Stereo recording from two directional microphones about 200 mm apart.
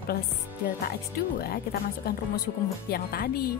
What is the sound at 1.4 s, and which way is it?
Speech, 50° left (ahead or behind).